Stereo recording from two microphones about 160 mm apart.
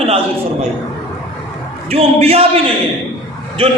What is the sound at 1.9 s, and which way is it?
Speech, 40° right (ahead or behind).